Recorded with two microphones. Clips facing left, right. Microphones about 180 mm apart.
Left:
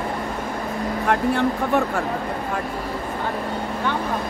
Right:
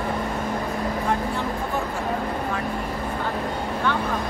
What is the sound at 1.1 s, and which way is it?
Speech, 65° left (ahead or behind).